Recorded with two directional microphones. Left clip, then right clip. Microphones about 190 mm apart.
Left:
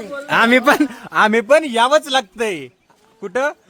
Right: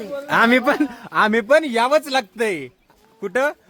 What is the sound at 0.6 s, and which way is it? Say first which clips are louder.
Speech: left 5 dB; 40° left (ahead or behind).